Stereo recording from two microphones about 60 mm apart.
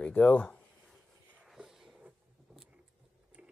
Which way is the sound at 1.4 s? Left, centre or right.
Centre.